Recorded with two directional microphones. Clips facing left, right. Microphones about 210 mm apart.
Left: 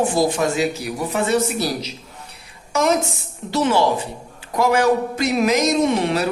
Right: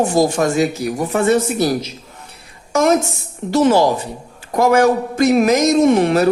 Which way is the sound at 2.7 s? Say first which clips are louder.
Right 4 dB; 45° right (ahead or behind).